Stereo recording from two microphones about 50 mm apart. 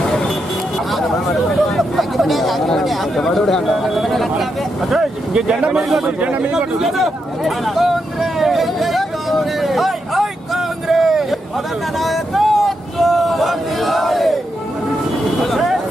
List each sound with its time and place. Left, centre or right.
0.9 s a sound: centre
5.3 s speech: centre
5.8 s a man's voice: centre
6.2 s speech: right
6.5 s a sound: centre
12.0 s vehicle: centre